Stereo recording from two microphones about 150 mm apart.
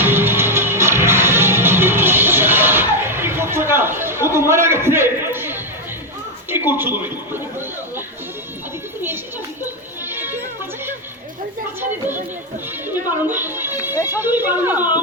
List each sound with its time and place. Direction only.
0.0 s music: 15° right (ahead or behind)
6.5 s speech: 15° right (ahead or behind)
10.1 s music: 15° right (ahead or behind)
11.8 s speech: 15° right (ahead or behind)
12.9 s music: 15° right (ahead or behind)
13.9 s speech: 20° left (ahead or behind)
14.2 s speech: 15° right (ahead or behind)